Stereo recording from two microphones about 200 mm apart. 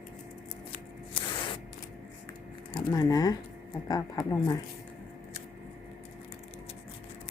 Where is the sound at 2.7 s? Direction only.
20° left (ahead or behind).